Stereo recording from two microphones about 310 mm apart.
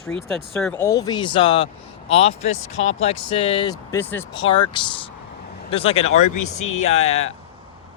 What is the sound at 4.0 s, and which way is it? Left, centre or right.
Speech, centre.